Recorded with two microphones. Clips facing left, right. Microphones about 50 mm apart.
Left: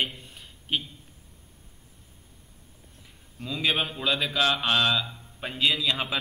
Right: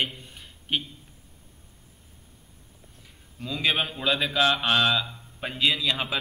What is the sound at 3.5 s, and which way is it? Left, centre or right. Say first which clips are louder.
Mantra: right 1 dB; centre.